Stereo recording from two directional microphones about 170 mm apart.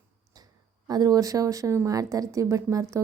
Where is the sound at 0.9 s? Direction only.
20° right (ahead or behind).